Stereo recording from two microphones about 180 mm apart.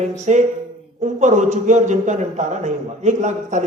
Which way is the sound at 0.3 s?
40° right (ahead or behind).